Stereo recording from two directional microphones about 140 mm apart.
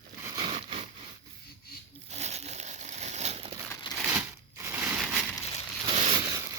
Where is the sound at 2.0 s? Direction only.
50° right (ahead or behind).